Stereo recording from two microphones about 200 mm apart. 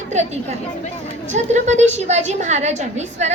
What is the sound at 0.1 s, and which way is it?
A woman's voice, 35° right (ahead or behind).